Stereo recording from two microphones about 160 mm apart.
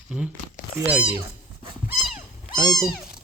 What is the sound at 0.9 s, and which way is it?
Speech, 10° right (ahead or behind).